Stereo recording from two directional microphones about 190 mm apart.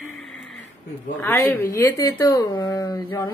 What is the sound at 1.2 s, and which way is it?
Speech, 15° left (ahead or behind).